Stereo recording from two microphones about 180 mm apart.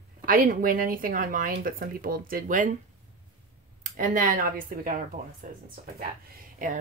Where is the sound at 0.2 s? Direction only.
50° right (ahead or behind).